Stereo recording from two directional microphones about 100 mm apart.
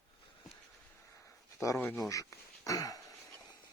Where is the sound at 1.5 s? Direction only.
30° left (ahead or behind).